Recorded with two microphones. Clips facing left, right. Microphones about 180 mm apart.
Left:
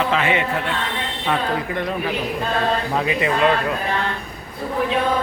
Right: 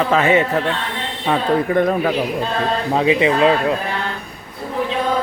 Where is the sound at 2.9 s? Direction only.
25° right (ahead or behind).